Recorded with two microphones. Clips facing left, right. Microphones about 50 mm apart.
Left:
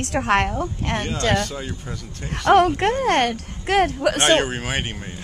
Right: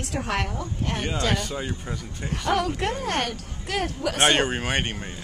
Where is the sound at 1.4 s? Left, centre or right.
Centre.